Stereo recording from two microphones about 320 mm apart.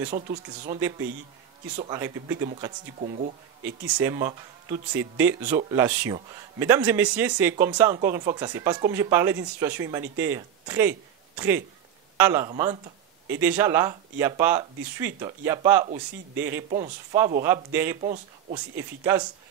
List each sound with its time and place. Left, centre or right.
0.1 s speech: right
0.7 s a man's voice: centre; by 3.9 s right
4.0 s a man's voice: centre
16.6 s speech: right
17.1 s a man's voice: centre
18.0 s speech: centre